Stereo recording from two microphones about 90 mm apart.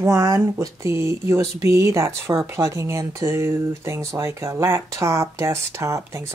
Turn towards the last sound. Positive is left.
turn(degrees=-30)  # may be behind; listen again after turning